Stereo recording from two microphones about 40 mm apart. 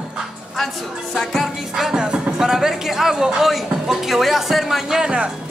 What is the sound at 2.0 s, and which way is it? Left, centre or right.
Music, right.